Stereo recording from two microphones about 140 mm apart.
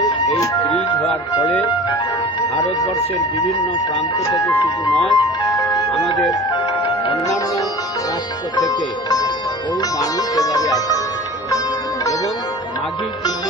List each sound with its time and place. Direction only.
0.0 s music: 25° left (ahead or behind)
1.4 s speech: 10° left (ahead or behind)
5.1 s music: 30° left (ahead or behind)
8.6 s speech: 25° left (ahead or behind)
10.3 s speech: 25° left (ahead or behind)